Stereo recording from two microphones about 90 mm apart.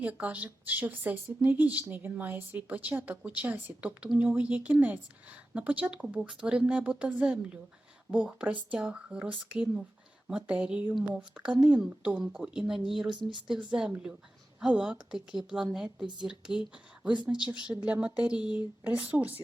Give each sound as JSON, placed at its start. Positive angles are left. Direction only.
{"t": 0.0, "sound": "speech", "side_deg": -15}
{"t": 13.1, "sound": "speech", "side_deg": -55}
{"t": 13.7, "sound": "speech", "side_deg": -10}